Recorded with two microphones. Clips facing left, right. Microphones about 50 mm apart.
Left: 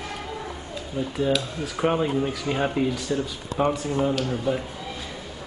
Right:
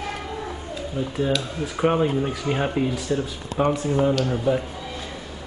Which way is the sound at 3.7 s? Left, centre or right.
Right.